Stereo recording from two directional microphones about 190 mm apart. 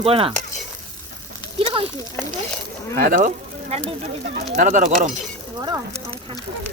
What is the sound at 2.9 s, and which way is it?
Speech, 45° right (ahead or behind).